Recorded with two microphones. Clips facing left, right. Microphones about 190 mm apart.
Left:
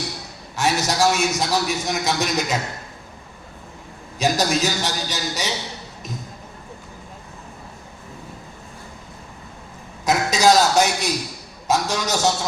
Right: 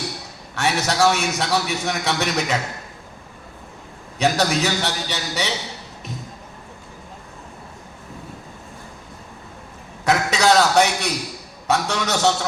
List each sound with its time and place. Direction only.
0.5 s a man's voice: 65° right (ahead or behind)
4.2 s a man's voice: 65° right (ahead or behind)
10.0 s a sound: 65° right (ahead or behind)
11.7 s a man's voice: 65° right (ahead or behind)